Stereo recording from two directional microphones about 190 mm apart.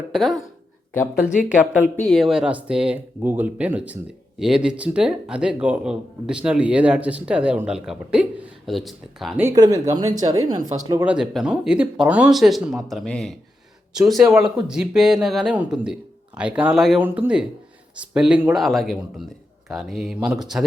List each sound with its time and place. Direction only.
0.1 s speech: centre (ahead or behind)
1.5 s speech: 5° right (ahead or behind)
9.6 s speech: 15° right (ahead or behind); by 20.7 s centre (ahead or behind)